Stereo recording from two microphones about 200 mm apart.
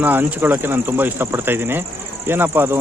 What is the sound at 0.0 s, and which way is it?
Speech, 10° right (ahead or behind).